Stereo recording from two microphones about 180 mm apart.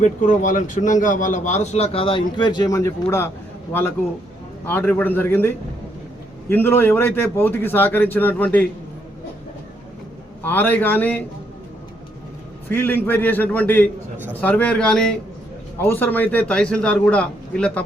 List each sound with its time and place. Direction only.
0.0 s a man's voice: 45° left (ahead or behind); by 8.6 s 10° left (ahead or behind)
10.4 s a man's voice: 10° left (ahead or behind)
12.6 s a man's voice: 10° left (ahead or behind)